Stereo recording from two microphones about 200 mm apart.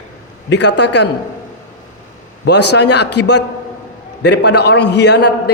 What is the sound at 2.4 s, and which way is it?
A man's voice, 60° left (ahead or behind).